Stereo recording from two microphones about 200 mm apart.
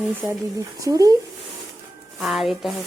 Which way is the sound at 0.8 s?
20° right (ahead or behind).